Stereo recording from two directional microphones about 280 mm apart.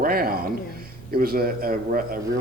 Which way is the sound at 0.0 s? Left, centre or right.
Right.